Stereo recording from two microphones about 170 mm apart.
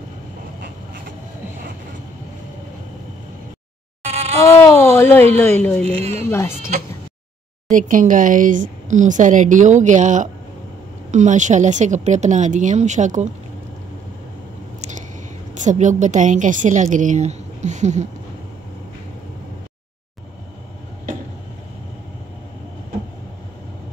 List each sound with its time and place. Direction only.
4.5 s a sound: 15° left (ahead or behind)
5.3 s a woman's voice: 10° left (ahead or behind)
5.9 s speech: 40° right (ahead or behind)
7.7 s a woman's voice: 50° right (ahead or behind)
15.6 s a woman's voice: 45° right (ahead or behind)